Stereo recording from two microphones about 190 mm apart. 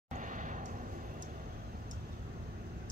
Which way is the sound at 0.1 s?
45° right (ahead or behind).